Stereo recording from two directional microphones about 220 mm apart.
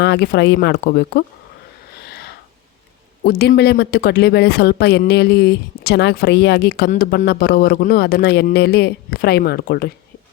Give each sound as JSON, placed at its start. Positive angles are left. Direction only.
{"t": 0.0, "sound": "speech", "side_deg": 50}
{"t": 2.0, "sound": "a sound", "side_deg": 45}
{"t": 3.2, "sound": "speech", "side_deg": 45}